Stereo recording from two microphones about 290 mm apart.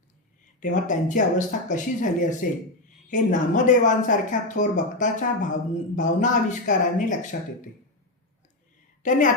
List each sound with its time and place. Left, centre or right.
0.6 s speech: left
9.0 s speech: left